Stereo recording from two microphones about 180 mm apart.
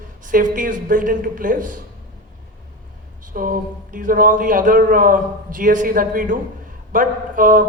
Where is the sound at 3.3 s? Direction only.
50° right (ahead or behind).